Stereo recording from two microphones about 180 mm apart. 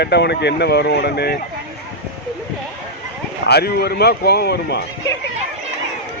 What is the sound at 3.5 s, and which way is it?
A man's voice, 60° left (ahead or behind).